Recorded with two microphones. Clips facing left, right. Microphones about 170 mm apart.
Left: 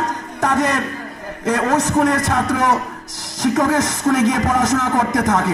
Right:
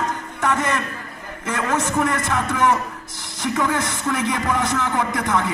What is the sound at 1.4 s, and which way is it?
A man's voice, 40° left (ahead or behind).